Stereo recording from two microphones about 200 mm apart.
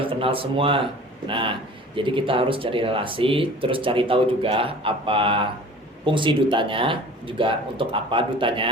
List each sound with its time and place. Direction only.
0.0 s speech: 25° right (ahead or behind)